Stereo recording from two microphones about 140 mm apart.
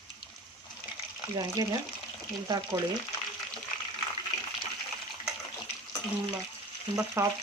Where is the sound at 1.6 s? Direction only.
25° right (ahead or behind).